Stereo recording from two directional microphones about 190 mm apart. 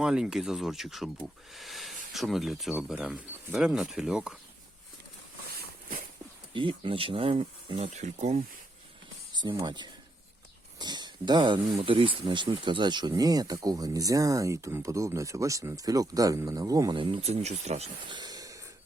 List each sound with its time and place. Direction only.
0.0 s speech: 5° right (ahead or behind)
6.5 s speech: 25° right (ahead or behind)
9.3 s speech: 25° right (ahead or behind)
18.2 s a sound: 20° right (ahead or behind)